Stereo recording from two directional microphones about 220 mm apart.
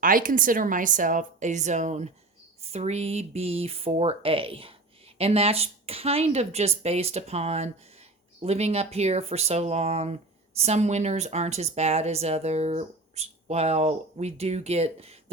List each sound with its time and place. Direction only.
0.0 s a woman's voice: 40° right (ahead or behind)